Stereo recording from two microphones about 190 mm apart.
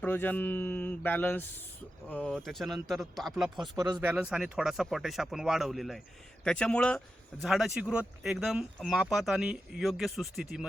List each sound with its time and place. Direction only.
0.0 s speech: 10° left (ahead or behind)
3.8 s speech: 20° right (ahead or behind)
4.1 s speech: 5° right (ahead or behind)